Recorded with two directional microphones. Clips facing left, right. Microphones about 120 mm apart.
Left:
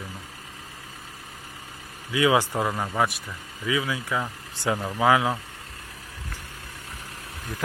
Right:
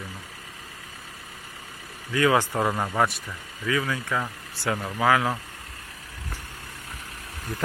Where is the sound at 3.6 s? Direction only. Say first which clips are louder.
Even; 10° left (ahead or behind).